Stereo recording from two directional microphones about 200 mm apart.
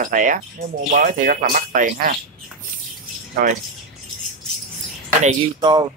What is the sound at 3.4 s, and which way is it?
Speech, 45° right (ahead or behind).